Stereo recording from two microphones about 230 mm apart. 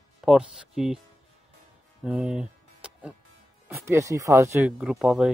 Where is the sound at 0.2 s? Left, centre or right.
Centre.